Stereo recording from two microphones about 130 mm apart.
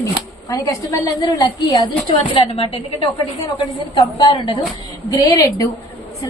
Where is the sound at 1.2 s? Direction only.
30° left (ahead or behind).